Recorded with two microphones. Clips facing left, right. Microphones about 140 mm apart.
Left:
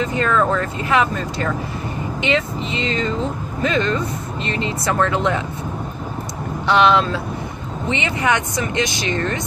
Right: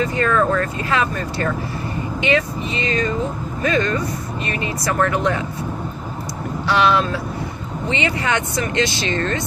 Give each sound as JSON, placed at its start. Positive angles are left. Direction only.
{"t": 0.0, "sound": "speech", "side_deg": 20}
{"t": 6.7, "sound": "speech", "side_deg": 20}